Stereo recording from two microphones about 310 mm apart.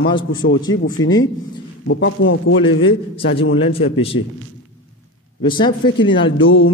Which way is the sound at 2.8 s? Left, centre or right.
Centre.